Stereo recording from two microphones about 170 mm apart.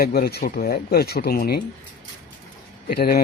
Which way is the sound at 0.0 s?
65° left (ahead or behind).